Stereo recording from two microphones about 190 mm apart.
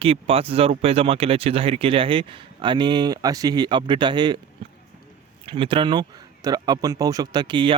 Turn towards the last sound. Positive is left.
turn(degrees=-25)  # may be behind; listen again after turning